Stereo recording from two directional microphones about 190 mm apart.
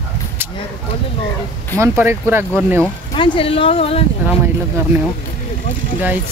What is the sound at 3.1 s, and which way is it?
Speech, 30° left (ahead or behind).